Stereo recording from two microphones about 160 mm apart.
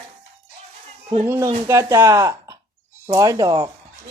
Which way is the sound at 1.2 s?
15° right (ahead or behind).